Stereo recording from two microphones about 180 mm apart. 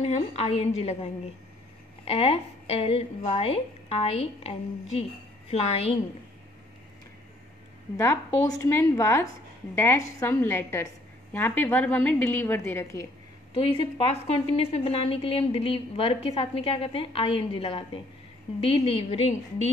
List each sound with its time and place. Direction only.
0.0 s a woman's voice: 35° left (ahead or behind)
8.0 s a woman's voice: 15° left (ahead or behind)
13.7 s a woman's voice: 30° left (ahead or behind)